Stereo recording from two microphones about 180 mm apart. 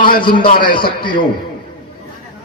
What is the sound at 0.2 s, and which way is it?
Speech, 25° left (ahead or behind).